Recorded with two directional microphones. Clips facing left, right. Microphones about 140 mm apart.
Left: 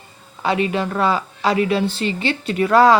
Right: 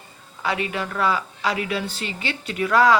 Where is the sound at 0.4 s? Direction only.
25° left (ahead or behind).